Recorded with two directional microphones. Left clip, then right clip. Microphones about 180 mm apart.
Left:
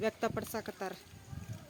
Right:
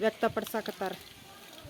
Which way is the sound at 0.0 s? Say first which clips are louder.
Right 6 dB; 10° left (ahead or behind).